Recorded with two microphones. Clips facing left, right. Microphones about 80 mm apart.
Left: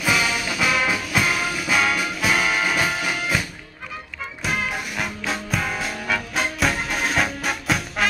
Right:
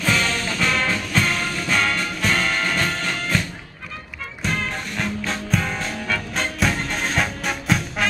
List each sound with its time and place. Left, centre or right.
0.0 s music: centre